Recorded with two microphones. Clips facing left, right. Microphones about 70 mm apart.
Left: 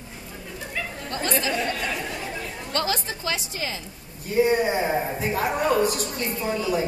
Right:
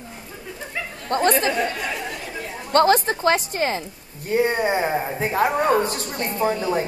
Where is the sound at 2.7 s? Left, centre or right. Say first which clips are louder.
Right 11 dB; right.